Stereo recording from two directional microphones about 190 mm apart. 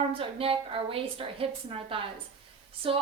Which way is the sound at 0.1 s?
30° right (ahead or behind).